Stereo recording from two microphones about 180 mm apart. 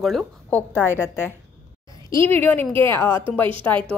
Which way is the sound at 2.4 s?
10° left (ahead or behind).